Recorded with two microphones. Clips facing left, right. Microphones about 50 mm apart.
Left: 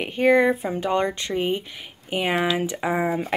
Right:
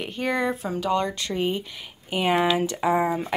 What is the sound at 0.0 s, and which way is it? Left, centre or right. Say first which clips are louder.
Speech: left 7 dB; left.